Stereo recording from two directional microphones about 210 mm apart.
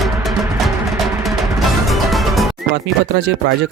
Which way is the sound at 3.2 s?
55° right (ahead or behind).